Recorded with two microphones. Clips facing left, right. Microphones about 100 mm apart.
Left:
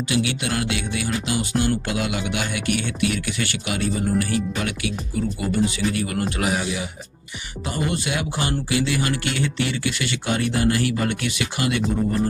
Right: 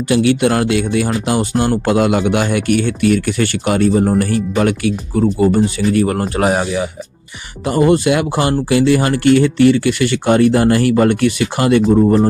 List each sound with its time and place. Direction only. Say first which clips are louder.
0.1 s speech: right 13 dB; 55° right (ahead or behind)